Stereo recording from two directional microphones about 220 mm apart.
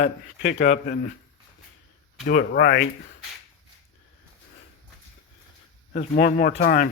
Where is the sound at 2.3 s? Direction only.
40° left (ahead or behind).